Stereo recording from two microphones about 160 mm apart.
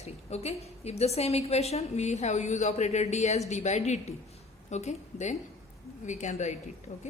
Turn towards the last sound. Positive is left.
turn(degrees=45)  # may be behind; listen again after turning